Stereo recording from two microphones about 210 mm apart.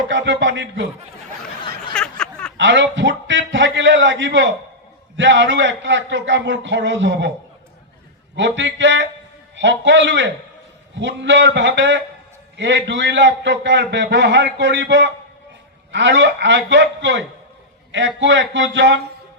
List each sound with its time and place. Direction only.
0.1 s a man's voice: 60° right (ahead or behind)
1.9 s a sound: 5° left (ahead or behind)
2.6 s a man's voice: 60° right (ahead or behind)
8.4 s a man's voice: 60° right (ahead or behind)